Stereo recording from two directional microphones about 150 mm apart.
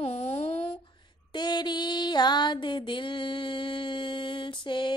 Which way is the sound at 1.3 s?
30° left (ahead or behind).